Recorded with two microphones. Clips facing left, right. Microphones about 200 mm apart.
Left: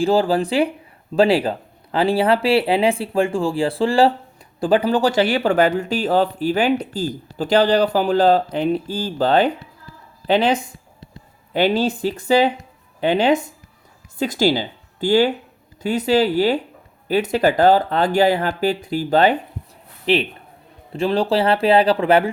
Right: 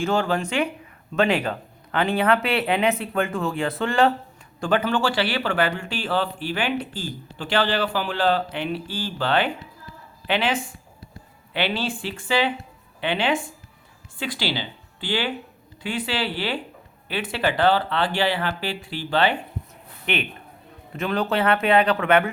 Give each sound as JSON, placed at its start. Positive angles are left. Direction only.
{"t": 0.0, "sound": "speech", "side_deg": 35}